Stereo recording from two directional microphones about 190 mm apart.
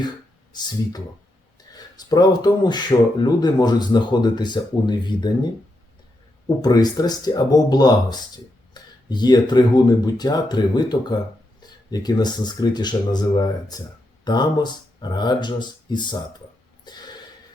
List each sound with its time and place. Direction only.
1.5 s speech: 20° left (ahead or behind)
6.6 s speech: 20° left (ahead or behind)